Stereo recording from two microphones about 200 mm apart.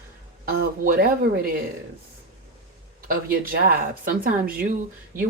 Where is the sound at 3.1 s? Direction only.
45° right (ahead or behind).